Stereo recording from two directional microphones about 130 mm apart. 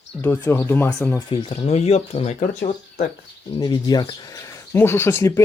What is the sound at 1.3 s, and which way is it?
Speech, 40° left (ahead or behind).